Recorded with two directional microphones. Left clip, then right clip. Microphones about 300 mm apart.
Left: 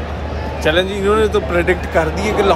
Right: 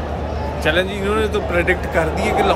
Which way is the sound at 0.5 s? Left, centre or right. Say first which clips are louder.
Left 3 dB; centre.